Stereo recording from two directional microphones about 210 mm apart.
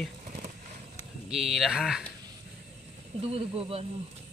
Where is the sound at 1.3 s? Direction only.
Centre (ahead or behind).